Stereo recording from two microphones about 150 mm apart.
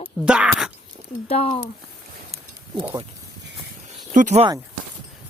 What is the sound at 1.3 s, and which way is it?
Speech, 45° left (ahead or behind).